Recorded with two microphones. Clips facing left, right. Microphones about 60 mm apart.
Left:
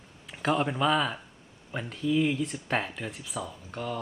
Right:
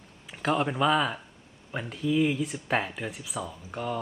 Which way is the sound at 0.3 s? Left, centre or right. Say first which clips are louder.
Even; centre.